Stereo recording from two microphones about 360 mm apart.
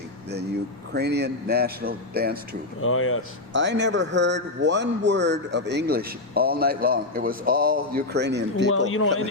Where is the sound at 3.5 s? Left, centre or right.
Right.